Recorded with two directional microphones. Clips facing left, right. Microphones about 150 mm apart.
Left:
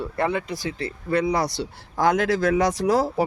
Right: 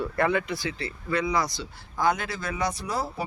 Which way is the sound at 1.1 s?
65° left (ahead or behind).